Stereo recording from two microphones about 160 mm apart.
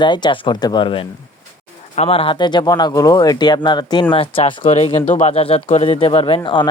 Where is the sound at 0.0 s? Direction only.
30° left (ahead or behind).